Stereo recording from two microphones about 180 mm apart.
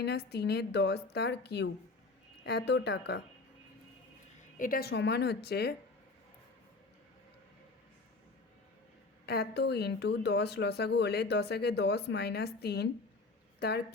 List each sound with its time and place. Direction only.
0.0 s speech: 65° left (ahead or behind)
4.5 s a woman's voice: 50° left (ahead or behind)
9.2 s speech: 60° left (ahead or behind)